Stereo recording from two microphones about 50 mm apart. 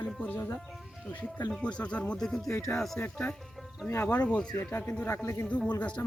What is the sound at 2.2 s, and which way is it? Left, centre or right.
Speech, centre.